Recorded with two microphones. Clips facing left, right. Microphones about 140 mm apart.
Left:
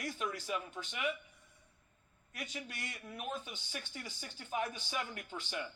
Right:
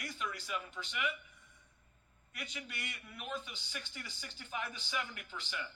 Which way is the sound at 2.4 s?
50° left (ahead or behind).